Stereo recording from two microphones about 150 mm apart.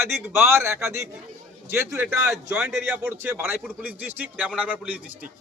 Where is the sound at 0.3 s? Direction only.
15° right (ahead or behind).